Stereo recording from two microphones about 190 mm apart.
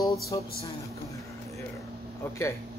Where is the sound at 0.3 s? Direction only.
20° left (ahead or behind).